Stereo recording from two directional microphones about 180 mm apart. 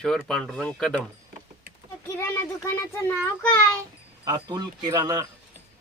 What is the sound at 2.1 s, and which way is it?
Speech, 15° left (ahead or behind).